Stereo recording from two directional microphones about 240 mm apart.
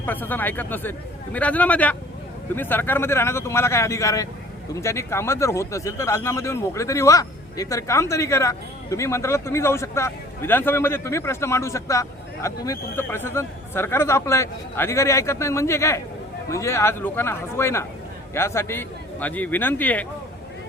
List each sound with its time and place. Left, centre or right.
0.0 s speech: centre